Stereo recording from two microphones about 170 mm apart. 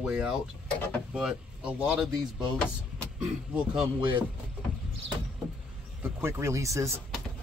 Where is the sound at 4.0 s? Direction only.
30° right (ahead or behind).